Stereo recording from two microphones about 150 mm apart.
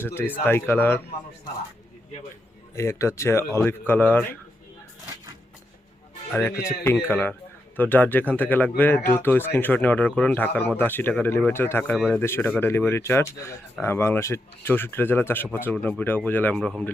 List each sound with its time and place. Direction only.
0.0 s speech: 15° left (ahead or behind)
2.7 s speech: 20° left (ahead or behind)
6.3 s speech: 15° left (ahead or behind)
12.2 s speech: 15° left (ahead or behind)
16.6 s speech: centre (ahead or behind)